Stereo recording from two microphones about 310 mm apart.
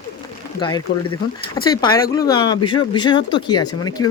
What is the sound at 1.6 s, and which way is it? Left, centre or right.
Speech, centre.